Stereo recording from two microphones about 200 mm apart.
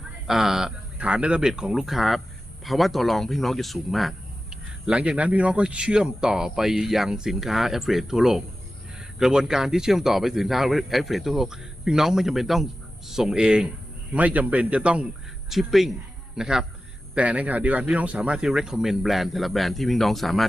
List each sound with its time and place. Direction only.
0.3 s speech: centre (ahead or behind)